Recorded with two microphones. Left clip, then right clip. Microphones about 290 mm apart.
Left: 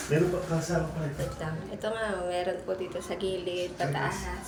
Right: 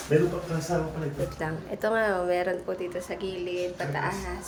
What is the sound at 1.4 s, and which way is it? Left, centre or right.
A woman's voice, centre.